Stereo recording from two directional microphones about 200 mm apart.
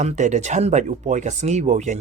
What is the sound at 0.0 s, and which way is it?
Speech, 35° right (ahead or behind).